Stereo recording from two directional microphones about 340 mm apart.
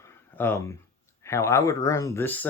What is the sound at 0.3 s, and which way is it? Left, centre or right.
Speech, centre.